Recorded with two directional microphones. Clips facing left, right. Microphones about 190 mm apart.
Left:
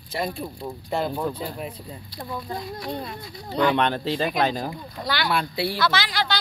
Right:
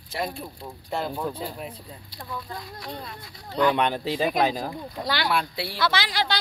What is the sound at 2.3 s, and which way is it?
Speech, 20° left (ahead or behind).